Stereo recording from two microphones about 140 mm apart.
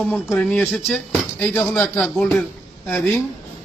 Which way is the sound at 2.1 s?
10° left (ahead or behind).